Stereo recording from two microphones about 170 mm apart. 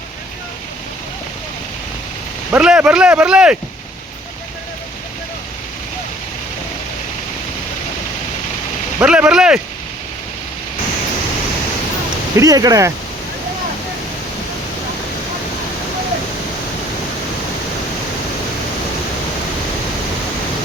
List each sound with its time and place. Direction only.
2.5 s speech: 5° right (ahead or behind)
9.0 s speech: 5° right (ahead or behind)
12.4 s speech: 20° right (ahead or behind)